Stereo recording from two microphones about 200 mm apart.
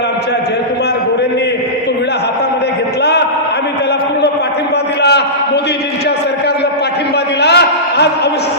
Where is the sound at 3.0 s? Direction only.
55° left (ahead or behind).